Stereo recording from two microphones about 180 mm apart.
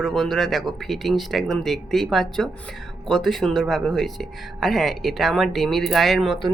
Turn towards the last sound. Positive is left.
turn(degrees=0)  # may be behind; listen again after turning